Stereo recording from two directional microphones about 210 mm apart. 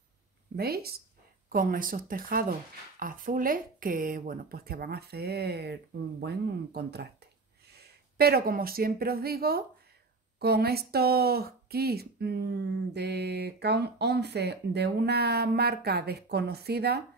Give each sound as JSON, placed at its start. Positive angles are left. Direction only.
{"t": 0.6, "sound": "speech", "side_deg": -45}